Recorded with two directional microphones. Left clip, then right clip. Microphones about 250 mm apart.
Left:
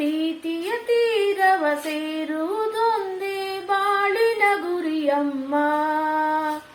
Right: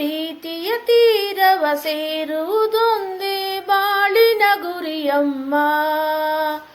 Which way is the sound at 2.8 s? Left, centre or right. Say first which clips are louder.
Right 4 dB; right.